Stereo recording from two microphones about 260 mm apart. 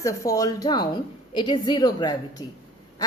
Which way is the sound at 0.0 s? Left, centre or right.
Centre.